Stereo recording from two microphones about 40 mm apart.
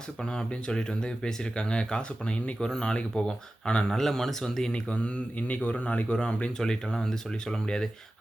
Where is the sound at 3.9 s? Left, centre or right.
Centre.